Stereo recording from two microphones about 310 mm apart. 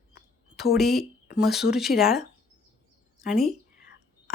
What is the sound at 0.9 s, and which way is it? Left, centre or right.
Speech, left.